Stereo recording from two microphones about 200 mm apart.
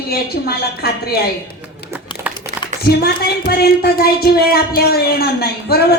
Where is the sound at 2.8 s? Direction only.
50° left (ahead or behind).